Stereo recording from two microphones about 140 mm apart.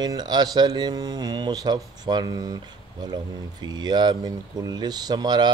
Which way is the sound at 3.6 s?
30° right (ahead or behind).